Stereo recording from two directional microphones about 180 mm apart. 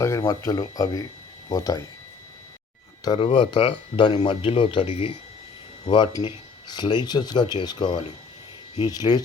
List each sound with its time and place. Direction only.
0.0 s speech: 15° left (ahead or behind)
3.0 s speech: 25° left (ahead or behind)